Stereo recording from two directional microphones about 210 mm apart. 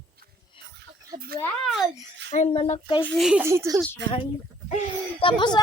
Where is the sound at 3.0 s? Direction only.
Centre (ahead or behind).